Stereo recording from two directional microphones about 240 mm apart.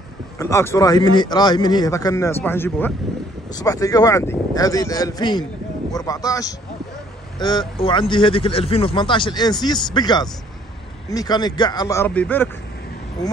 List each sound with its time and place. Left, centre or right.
0.4 s speech: centre